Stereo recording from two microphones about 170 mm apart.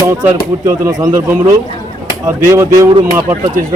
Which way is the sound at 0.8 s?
20° right (ahead or behind).